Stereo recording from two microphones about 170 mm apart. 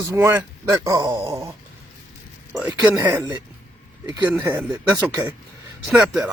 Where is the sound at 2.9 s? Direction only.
15° right (ahead or behind).